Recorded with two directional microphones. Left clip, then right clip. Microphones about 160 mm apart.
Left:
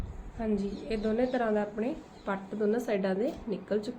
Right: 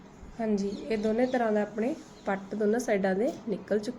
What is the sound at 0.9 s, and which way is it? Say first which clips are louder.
A woman's voice: right 2 dB; 20° right (ahead or behind).